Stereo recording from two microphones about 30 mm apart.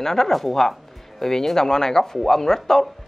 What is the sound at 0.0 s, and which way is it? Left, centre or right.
Speech, centre.